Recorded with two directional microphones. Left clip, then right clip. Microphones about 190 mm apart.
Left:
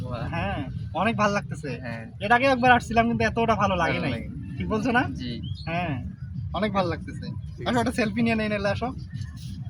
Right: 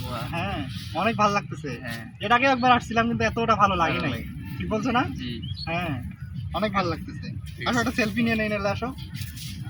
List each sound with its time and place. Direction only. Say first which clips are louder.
0.2 s a man's voice: even; 25° left (ahead or behind)